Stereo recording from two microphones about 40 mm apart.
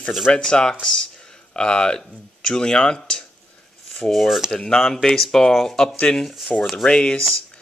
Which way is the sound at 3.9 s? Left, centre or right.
Centre.